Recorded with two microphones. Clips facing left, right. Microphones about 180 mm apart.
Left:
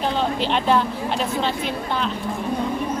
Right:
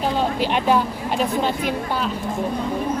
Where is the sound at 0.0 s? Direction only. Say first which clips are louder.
Right 1 dB; 10° right (ahead or behind).